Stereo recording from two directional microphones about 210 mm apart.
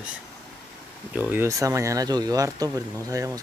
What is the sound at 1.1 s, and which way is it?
Speech, 10° right (ahead or behind).